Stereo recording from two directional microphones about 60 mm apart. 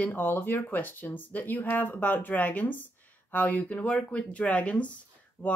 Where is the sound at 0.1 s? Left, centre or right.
Left.